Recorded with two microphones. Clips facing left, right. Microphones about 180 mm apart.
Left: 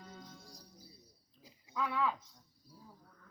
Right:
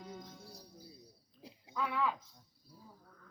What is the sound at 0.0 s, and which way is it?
Jingle bell, 10° right (ahead or behind).